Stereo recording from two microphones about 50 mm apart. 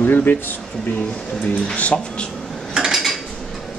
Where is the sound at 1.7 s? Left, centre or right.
Left.